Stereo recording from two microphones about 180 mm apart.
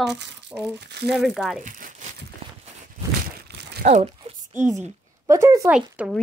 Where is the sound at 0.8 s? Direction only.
70° right (ahead or behind).